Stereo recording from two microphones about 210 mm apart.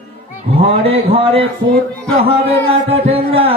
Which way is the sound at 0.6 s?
30° right (ahead or behind).